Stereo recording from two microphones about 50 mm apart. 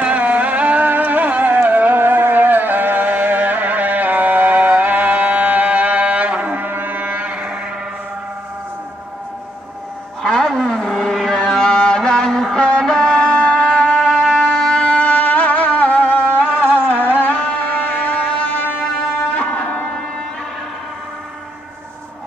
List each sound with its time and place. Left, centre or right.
0.0 s carnatic music: right
1.7 s music: right
10.2 s music: centre
11.4 s music: centre
14.0 s music: centre
14.7 s music: centre
15.0 s music: left
16.5 s a sound: left
17.0 s music: left
19.3 s shofar: left